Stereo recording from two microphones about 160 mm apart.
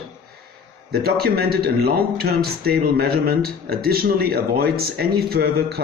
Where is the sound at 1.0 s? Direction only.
75° right (ahead or behind).